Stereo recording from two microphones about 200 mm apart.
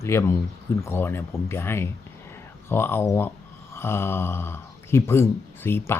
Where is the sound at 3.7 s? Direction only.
10° left (ahead or behind).